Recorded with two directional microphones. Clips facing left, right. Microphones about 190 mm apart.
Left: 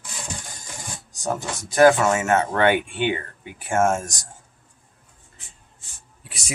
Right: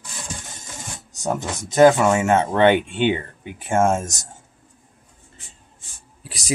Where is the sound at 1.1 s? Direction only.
20° right (ahead or behind).